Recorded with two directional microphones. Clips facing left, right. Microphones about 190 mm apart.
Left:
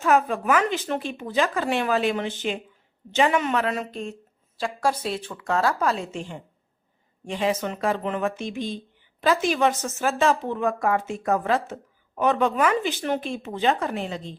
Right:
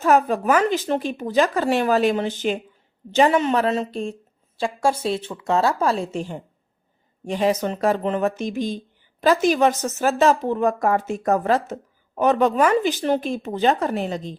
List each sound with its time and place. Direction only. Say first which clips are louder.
0.0 s a woman's voice: right 3 dB; 40° right (ahead or behind)